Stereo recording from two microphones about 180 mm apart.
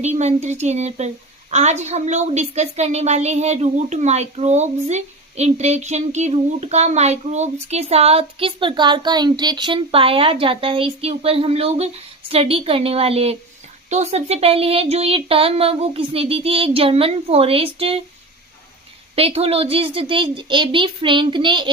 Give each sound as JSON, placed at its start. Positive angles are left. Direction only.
{"t": 0.0, "sound": "a woman's voice", "side_deg": -40}
{"t": 19.1, "sound": "a woman's voice", "side_deg": -35}